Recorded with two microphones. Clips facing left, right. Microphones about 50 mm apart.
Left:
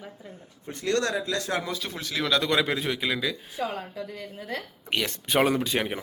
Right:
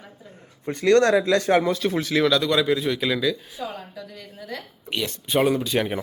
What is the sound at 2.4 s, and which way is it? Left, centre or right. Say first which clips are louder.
Speech: right 4 dB; left.